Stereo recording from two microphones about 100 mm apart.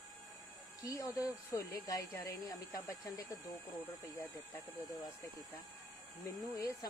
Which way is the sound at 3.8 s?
20° left (ahead or behind).